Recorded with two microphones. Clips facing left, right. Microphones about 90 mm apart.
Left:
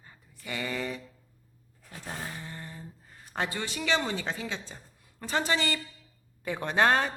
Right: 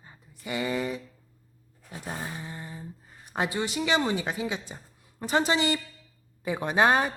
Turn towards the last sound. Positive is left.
turn(degrees=-10)  # may be behind; listen again after turning